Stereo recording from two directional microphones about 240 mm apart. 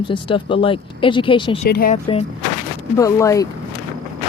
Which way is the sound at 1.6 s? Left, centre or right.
Left.